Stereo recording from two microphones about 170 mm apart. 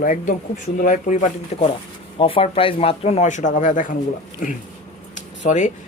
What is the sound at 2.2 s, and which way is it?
A man's voice, 30° left (ahead or behind).